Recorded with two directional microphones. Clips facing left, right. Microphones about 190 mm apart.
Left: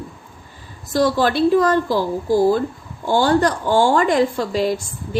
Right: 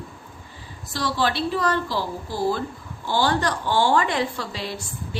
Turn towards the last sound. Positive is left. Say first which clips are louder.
# left 9 dB
turn(degrees=45)  # may be behind; listen again after turning